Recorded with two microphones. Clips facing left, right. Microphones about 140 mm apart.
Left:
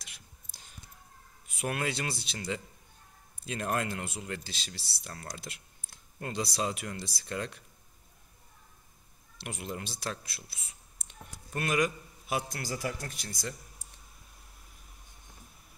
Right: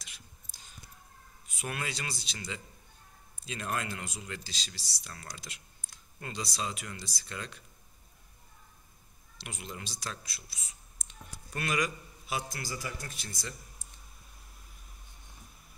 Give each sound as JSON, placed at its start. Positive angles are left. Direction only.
{"t": 0.0, "sound": "whispering", "side_deg": 60}
{"t": 1.6, "sound": "speech", "side_deg": 55}
{"t": 3.4, "sound": "speech", "side_deg": 50}
{"t": 5.1, "sound": "speech", "side_deg": 40}
{"t": 5.4, "sound": "speech", "side_deg": 55}
{"t": 9.4, "sound": "speech", "side_deg": 55}